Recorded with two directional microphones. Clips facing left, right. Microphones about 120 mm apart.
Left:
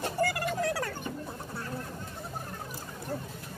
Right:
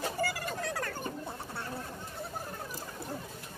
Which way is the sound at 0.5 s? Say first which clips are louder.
Left 5 dB; 5° left (ahead or behind).